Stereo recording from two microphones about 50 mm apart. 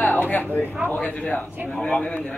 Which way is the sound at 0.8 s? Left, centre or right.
Left.